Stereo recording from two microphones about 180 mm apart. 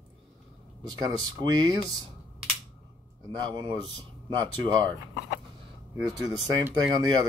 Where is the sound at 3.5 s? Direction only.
25° right (ahead or behind).